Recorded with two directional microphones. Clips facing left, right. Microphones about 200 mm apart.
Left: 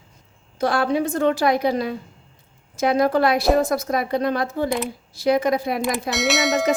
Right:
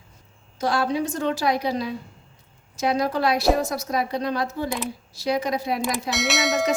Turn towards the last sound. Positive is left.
turn(degrees=0)  # may be behind; listen again after turning